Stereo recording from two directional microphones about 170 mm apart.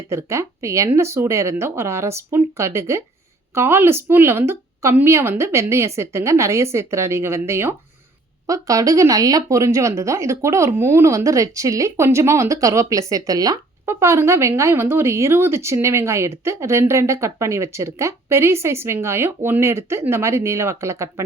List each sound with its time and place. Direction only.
0.1 s speech: 15° right (ahead or behind)